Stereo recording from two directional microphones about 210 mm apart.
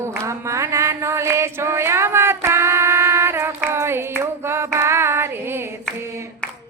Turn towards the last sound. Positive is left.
turn(degrees=-15)  # may be behind; listen again after turning